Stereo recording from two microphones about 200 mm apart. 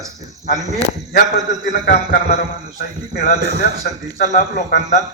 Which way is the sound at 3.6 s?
40° left (ahead or behind).